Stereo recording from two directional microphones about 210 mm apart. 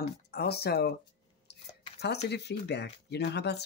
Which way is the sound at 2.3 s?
55° left (ahead or behind).